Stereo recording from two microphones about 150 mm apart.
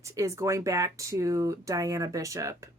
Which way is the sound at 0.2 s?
20° right (ahead or behind).